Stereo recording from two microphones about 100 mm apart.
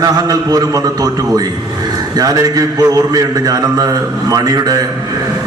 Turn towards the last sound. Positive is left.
turn(degrees=-40)  # may be behind; listen again after turning